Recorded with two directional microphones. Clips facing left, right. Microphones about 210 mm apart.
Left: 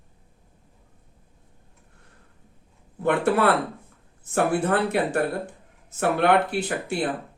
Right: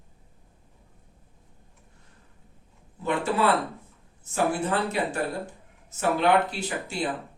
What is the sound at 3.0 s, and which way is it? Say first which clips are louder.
Speech: left 4 dB; 60° left (ahead or behind).